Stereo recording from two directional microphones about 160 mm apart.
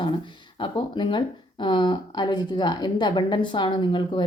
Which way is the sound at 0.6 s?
30° left (ahead or behind).